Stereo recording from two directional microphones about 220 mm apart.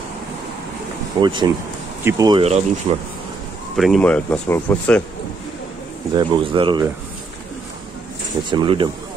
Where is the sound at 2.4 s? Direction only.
25° right (ahead or behind).